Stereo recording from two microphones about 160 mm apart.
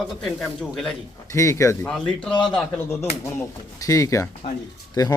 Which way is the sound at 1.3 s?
20° left (ahead or behind).